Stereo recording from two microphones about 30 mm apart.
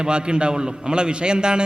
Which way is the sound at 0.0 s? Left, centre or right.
Right.